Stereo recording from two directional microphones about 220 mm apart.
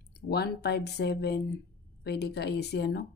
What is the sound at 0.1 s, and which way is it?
Speech, 45° left (ahead or behind).